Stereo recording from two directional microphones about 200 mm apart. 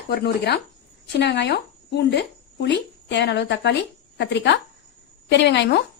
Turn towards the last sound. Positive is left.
turn(degrees=60)  # may be behind; listen again after turning